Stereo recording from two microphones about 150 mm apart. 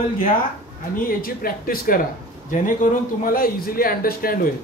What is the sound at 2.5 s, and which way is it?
A man's voice, 60° left (ahead or behind).